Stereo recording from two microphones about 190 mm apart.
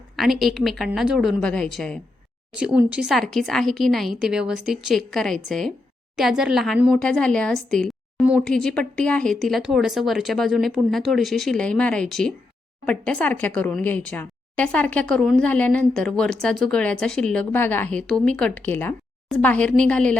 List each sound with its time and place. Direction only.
0.2 s a woman's voice: centre (ahead or behind)